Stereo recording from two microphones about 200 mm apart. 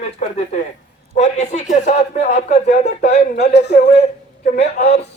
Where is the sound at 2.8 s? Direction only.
50° left (ahead or behind).